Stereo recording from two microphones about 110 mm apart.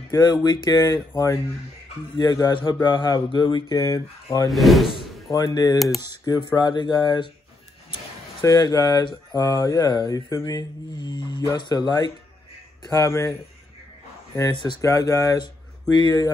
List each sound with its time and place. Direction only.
0.1 s speech: 35° left (ahead or behind)
4.5 s speech: centre (ahead or behind)
5.3 s speech: 35° left (ahead or behind)
8.5 s speech: 35° left (ahead or behind)
12.8 s speech: 30° left (ahead or behind)
14.5 s speech: 40° left (ahead or behind)
14.8 s speech: 30° left (ahead or behind)
15.4 s a sound: 40° left (ahead or behind)